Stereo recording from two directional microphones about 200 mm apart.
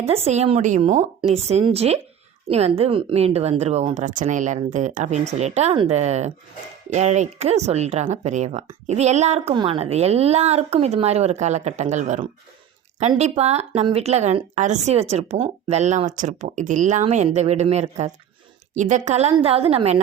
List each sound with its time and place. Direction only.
0.0 s a woman's voice: 30° right (ahead or behind)